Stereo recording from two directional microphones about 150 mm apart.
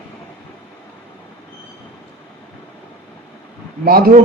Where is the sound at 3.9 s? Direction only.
80° right.